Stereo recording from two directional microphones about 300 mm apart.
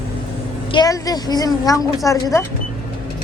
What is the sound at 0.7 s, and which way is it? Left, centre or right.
A woman's voice, centre.